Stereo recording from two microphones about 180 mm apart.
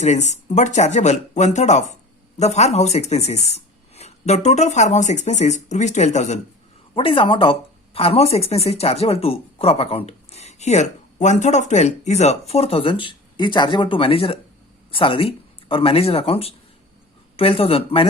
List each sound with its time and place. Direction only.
0.0 s speech: 40° left (ahead or behind)